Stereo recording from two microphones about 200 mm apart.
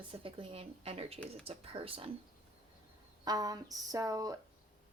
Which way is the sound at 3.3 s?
20° right (ahead or behind).